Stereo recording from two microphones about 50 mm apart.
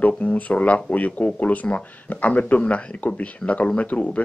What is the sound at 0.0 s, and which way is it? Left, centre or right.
Speech, left.